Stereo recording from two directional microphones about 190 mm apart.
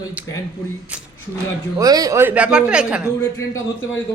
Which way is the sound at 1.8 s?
20° right (ahead or behind).